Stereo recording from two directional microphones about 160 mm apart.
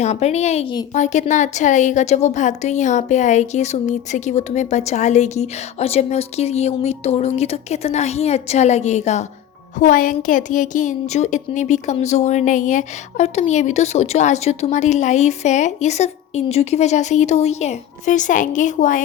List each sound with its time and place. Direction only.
0.0 s a woman's voice: 45° left (ahead or behind)